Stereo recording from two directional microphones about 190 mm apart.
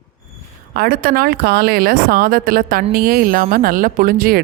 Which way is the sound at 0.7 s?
55° right (ahead or behind).